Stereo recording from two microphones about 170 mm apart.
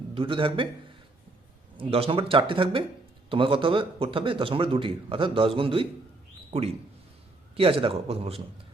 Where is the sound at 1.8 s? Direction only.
35° right (ahead or behind).